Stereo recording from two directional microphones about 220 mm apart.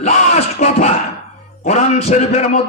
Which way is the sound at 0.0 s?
30° left (ahead or behind).